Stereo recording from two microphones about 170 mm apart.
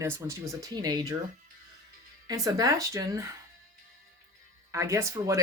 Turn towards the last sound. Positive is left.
turn(degrees=-15)  # may be behind; listen again after turning